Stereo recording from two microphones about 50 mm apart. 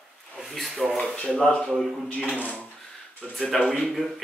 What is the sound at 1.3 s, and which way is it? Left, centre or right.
Speech, centre.